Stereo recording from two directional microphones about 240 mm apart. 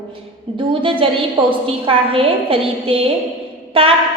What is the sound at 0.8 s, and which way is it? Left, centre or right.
A woman's voice, right.